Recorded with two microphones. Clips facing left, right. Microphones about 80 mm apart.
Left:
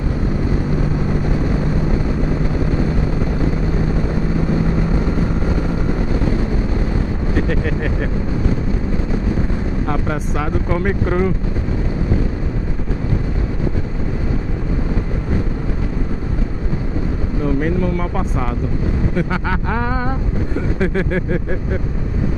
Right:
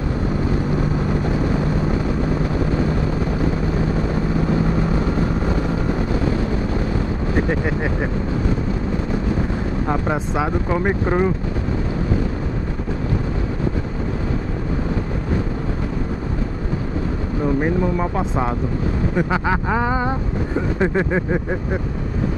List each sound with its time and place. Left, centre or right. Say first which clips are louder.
7.4 s vehicle: even; right
9.8 s speech: right 2 dB; centre
17.6 s vehicle: even; right
19.1 s speech: right 1 dB; centre
20.8 s vehicle: even; right